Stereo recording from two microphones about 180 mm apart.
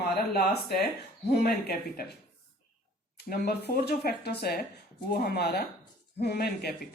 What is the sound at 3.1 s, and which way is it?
Speech, 65° left (ahead or behind).